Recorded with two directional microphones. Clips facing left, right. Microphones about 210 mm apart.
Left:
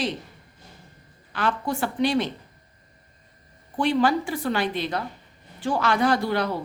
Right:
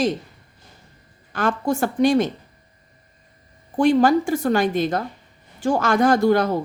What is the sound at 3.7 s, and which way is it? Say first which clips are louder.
A woman's voice: right 6 dB; 45° right (ahead or behind).